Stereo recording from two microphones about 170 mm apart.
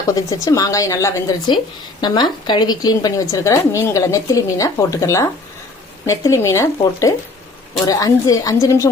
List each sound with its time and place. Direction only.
0.1 s speech: 20° left (ahead or behind)